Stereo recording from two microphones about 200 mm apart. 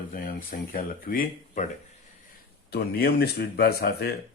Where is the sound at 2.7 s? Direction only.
50° left (ahead or behind).